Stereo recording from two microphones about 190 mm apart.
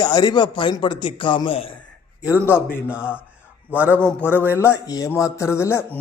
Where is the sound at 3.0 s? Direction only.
10° left (ahead or behind).